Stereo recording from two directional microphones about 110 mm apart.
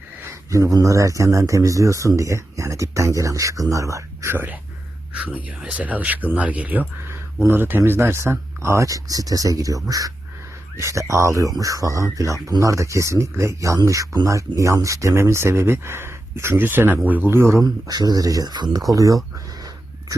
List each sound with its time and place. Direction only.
0.2 s speech: 25° right (ahead or behind)
17.8 s speech: 35° right (ahead or behind)